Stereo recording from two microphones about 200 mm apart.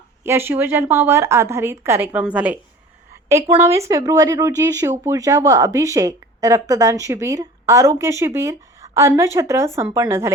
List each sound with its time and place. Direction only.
0.3 s speech: 10° right (ahead or behind)
3.6 s speech: 15° right (ahead or behind)